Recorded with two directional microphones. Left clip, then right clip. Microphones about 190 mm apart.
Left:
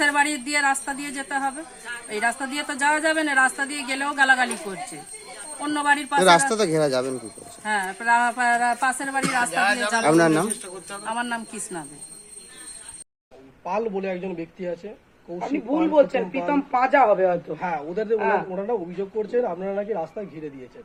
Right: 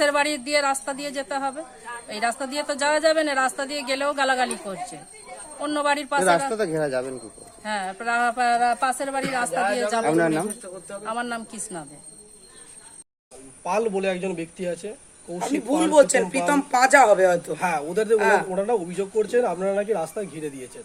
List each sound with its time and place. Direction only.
0.0 s a woman's voice: 25° right (ahead or behind)
5.7 s a woman's voice: 25° right (ahead or behind)
6.2 s speech: 50° left (ahead or behind)
7.6 s a woman's voice: 20° right (ahead or behind)
9.5 s speech: 45° right (ahead or behind)
10.0 s speech: 45° left (ahead or behind)
11.0 s a woman's voice: 20° right (ahead or behind)
13.7 s speech: 60° right (ahead or behind)
15.4 s a woman's voice: 30° right (ahead or behind)
17.5 s speech: 60° right (ahead or behind)
18.2 s a woman's voice: 25° right (ahead or behind)
18.5 s speech: 65° right (ahead or behind)